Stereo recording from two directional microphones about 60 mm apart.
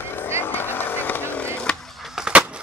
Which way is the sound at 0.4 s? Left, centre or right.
Left.